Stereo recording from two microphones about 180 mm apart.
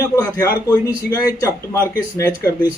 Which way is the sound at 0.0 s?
15° left (ahead or behind).